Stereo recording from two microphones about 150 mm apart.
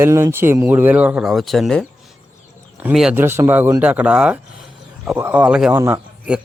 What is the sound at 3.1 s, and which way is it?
Speech, 15° right (ahead or behind).